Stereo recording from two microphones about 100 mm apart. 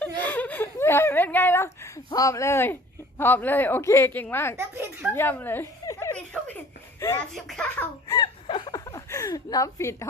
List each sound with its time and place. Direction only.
0.0 s a sound: 15° left (ahead or behind)
2.1 s a woman's voice: 30° left (ahead or behind)
4.5 s a child's voice: 25° right (ahead or behind)
5.1 s a woman's voice: 20° left (ahead or behind)
5.8 s giggle: 35° left (ahead or behind)
7.3 s speech: 5° left (ahead or behind)
8.0 s a sound: 40° left (ahead or behind)
8.4 s a sound: 50° left (ahead or behind)
8.9 s speech: 35° left (ahead or behind)